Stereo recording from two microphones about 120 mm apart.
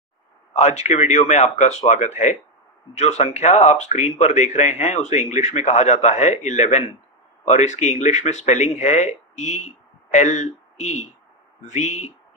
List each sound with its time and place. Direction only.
0.5 s a man's voice: 70° left (ahead or behind)